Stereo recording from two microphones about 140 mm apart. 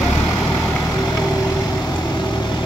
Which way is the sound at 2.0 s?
30° left (ahead or behind).